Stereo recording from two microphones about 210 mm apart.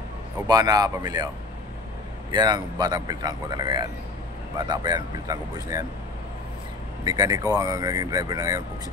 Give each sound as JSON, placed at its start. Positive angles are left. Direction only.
{"t": 0.5, "sound": "speech", "side_deg": -20}
{"t": 2.3, "sound": "a man's voice", "side_deg": -20}
{"t": 7.1, "sound": "speech", "side_deg": -15}